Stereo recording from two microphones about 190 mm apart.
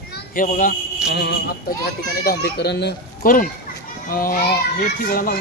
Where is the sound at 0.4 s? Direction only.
45° left (ahead or behind).